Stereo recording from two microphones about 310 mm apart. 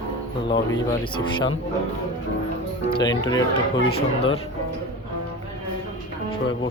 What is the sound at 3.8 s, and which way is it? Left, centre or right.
Speech, centre.